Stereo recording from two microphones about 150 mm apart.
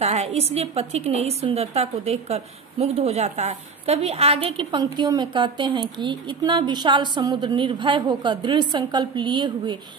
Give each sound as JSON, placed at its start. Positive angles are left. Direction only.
{"t": 0.0, "sound": "a woman's voice", "side_deg": -45}